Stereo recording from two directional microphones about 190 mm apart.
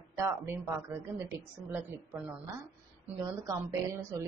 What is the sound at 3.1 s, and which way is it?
A woman's voice, 15° right (ahead or behind).